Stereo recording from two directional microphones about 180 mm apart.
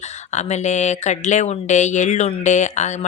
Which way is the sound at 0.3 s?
40° left (ahead or behind).